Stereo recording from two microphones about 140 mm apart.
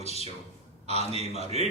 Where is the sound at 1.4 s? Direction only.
50° right (ahead or behind).